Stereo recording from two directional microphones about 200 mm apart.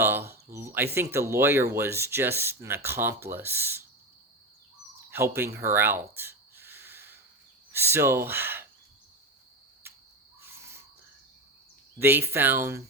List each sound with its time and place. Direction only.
0.0 s a sound: 10° right (ahead or behind)
0.9 s speech: 15° right (ahead or behind)
5.1 s a sound: 10° right (ahead or behind)
7.7 s speech: 10° right (ahead or behind)
9.8 s cricket: 10° right (ahead or behind)
10.4 s owl: 15° right (ahead or behind)
11.9 s speech: 10° right (ahead or behind)